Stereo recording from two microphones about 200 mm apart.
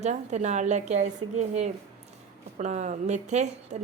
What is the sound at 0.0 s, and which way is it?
A woman's voice, 35° right (ahead or behind).